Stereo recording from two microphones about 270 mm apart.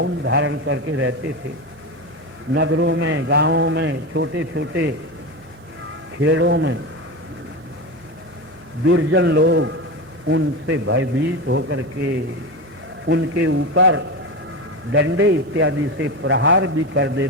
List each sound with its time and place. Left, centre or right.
0.0 s a man's voice: right
2.5 s a man's voice: right
6.2 s a man's voice: right
8.8 s a man's voice: right
13.1 s a man's voice: right